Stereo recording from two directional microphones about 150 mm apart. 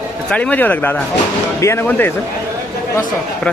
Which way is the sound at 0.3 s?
5° left (ahead or behind).